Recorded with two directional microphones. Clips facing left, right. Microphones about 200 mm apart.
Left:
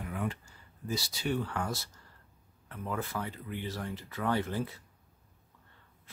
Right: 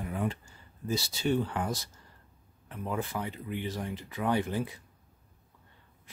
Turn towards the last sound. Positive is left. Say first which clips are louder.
# right 2 dB
turn(degrees=-15)  # may be behind; listen again after turning